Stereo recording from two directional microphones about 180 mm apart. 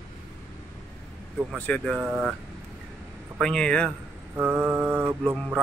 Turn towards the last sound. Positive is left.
turn(degrees=-10)  # may be behind; listen again after turning